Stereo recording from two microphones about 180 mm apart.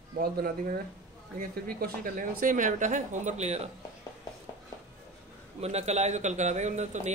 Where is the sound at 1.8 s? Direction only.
50° right (ahead or behind).